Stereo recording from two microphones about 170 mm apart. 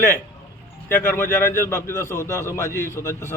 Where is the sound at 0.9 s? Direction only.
15° left (ahead or behind).